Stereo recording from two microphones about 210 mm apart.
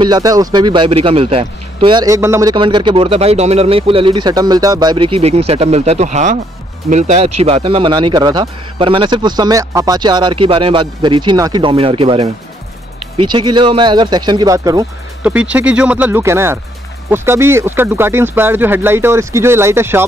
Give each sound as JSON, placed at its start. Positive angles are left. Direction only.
{"t": 0.0, "sound": "a man's voice", "side_deg": -20}